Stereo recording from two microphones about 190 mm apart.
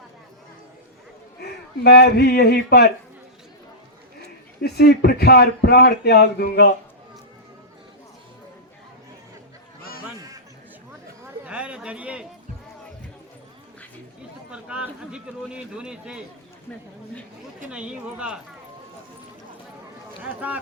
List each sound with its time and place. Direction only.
1.8 s a man's voice: 60° left (ahead or behind)
4.6 s a man's voice: 55° left (ahead or behind)
11.4 s a sound: 5° right (ahead or behind)
14.5 s a man's voice: 5° right (ahead or behind)
17.7 s a man's voice: 5° right (ahead or behind)
20.2 s speech: 10° right (ahead or behind)